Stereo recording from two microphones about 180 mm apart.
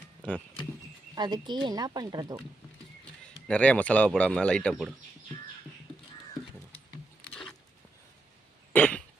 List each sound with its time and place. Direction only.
1.1 s speech: 25° right (ahead or behind)
3.4 s speech: 5° left (ahead or behind)
8.7 s throat clearing: 5° left (ahead or behind)